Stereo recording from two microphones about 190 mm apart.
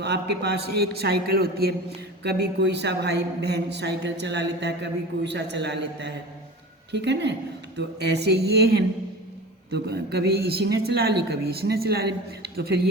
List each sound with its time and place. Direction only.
0.0 s a man's voice: 60° right (ahead or behind)